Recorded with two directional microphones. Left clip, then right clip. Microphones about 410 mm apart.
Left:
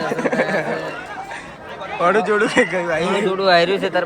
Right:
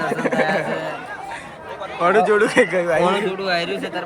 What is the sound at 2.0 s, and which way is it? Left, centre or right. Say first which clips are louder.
Speech: right 1 dB; centre.